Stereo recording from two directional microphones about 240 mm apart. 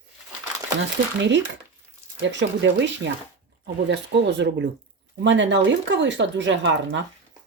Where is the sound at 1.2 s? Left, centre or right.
Right.